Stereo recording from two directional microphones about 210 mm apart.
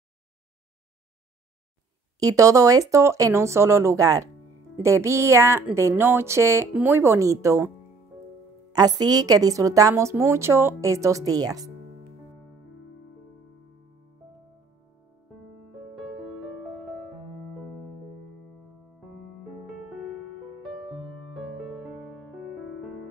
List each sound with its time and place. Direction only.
2.1 s a woman's voice: 15° right (ahead or behind)
8.7 s a woman's voice: 20° right (ahead or behind)
16.0 s music: centre (ahead or behind)
19.6 s music: centre (ahead or behind)
22.0 s music: centre (ahead or behind)